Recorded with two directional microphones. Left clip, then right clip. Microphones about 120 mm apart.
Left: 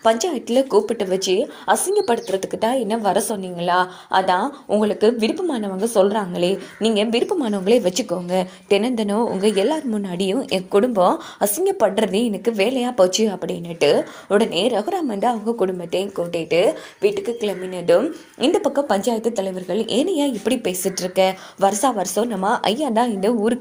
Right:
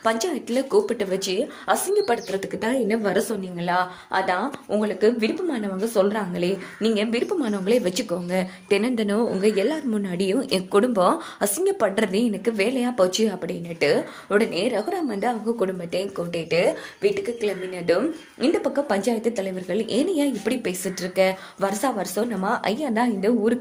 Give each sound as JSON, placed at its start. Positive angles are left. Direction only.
{"t": 0.0, "sound": "speech", "side_deg": 30}
{"t": 4.8, "sound": "speech", "side_deg": 55}
{"t": 5.0, "sound": "a woman's voice", "side_deg": 35}
{"t": 10.3, "sound": "a woman's voice", "side_deg": 10}
{"t": 18.7, "sound": "a woman's voice", "side_deg": 25}
{"t": 22.4, "sound": "a woman's voice", "side_deg": 50}